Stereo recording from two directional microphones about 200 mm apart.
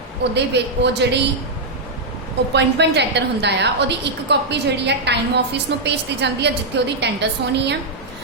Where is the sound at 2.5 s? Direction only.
60° right (ahead or behind).